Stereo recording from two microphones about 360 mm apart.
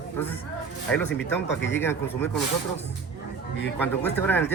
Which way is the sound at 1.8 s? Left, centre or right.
Centre.